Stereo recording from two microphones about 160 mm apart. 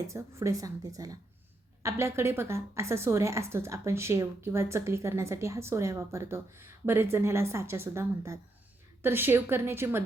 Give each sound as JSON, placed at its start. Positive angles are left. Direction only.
{"t": 0.1, "sound": "a woman's voice", "side_deg": -20}